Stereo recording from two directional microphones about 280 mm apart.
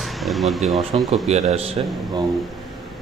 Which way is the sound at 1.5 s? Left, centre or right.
Right.